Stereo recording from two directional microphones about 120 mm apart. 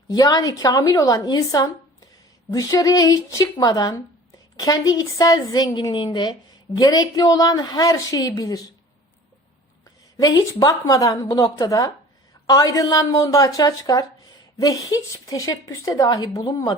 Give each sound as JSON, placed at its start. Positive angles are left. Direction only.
{"t": 0.1, "sound": "a woman's voice", "side_deg": 35}
{"t": 9.8, "sound": "speech", "side_deg": 30}